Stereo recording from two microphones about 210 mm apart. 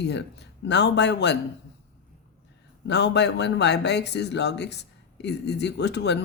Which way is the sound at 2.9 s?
55° left (ahead or behind).